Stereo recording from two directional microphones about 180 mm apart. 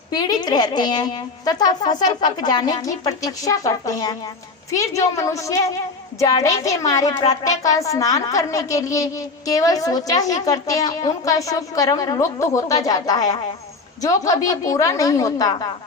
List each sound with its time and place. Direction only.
0.1 s a woman's voice: 20° left (ahead or behind)